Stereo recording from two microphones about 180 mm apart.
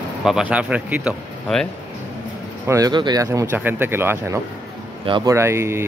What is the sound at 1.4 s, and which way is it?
Speech, 5° left (ahead or behind).